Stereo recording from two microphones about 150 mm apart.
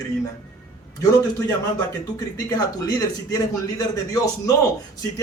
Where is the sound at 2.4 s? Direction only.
25° left (ahead or behind).